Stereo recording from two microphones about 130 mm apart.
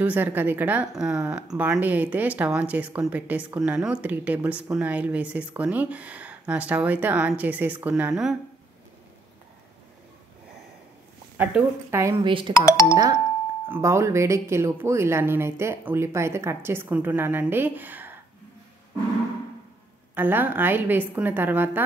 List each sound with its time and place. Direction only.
0.0 s speech: 15° right (ahead or behind)
11.9 s speech: 20° right (ahead or behind)
12.2 s speech: 40° right (ahead or behind)
12.6 s speech: 25° left (ahead or behind)
12.9 s speech: 30° right (ahead or behind)
13.7 s speech: 20° right (ahead or behind)
20.2 s speech: 15° right (ahead or behind)